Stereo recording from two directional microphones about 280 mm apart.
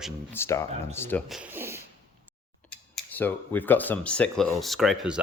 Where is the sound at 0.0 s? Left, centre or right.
Centre.